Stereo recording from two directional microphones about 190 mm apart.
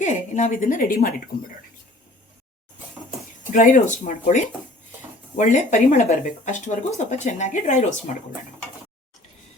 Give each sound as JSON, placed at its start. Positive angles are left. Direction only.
{"t": 0.0, "sound": "a woman's voice", "side_deg": 40}
{"t": 3.5, "sound": "speech", "side_deg": 40}